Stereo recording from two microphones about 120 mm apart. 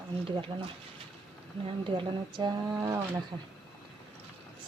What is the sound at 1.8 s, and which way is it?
Speech, 45° right (ahead or behind).